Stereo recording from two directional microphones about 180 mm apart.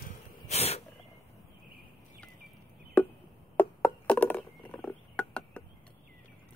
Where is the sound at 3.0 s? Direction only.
10° left (ahead or behind).